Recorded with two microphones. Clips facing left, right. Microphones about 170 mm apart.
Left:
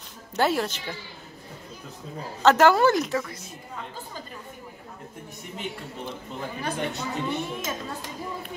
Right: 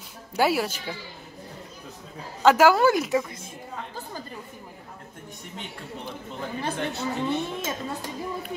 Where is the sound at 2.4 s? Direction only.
10° right (ahead or behind).